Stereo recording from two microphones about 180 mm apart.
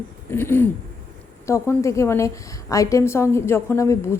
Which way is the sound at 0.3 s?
10° left (ahead or behind).